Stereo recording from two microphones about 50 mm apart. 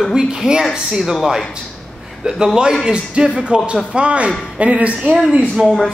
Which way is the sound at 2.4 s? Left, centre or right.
Centre.